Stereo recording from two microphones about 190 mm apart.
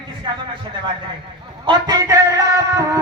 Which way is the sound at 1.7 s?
20° right (ahead or behind).